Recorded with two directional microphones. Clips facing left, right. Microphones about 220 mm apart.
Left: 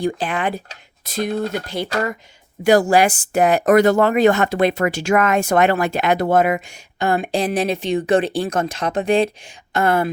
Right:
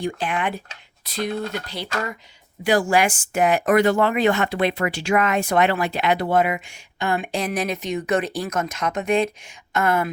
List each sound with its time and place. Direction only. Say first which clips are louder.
0.2 s speech: left 3 dB; 35° left (ahead or behind)